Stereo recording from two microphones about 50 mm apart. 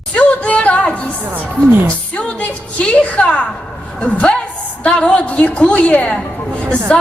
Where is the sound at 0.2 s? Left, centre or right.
Left.